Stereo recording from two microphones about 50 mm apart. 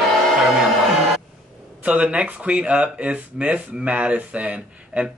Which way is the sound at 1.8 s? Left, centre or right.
Right.